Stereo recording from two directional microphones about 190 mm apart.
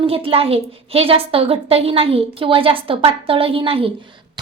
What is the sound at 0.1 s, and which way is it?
A woman's voice, 30° right (ahead or behind).